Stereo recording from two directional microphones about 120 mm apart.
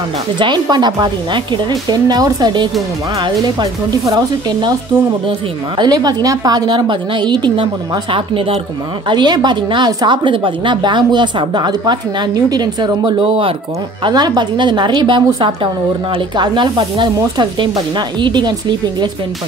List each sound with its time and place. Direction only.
0.4 s a woman's voice: 40° right (ahead or behind)
5.8 s a woman's voice: 35° right (ahead or behind)
13.2 s speech: 50° right (ahead or behind)
14.0 s a woman's voice: 35° right (ahead or behind)